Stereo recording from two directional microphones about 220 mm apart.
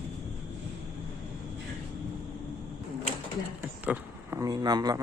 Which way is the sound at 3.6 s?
10° right (ahead or behind).